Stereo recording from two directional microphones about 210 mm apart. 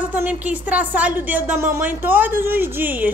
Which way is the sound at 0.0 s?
10° right (ahead or behind).